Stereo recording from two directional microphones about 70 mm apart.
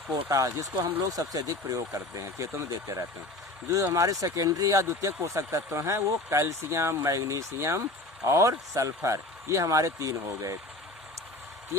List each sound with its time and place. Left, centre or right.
0.3 s speech: right
1.0 s speech: right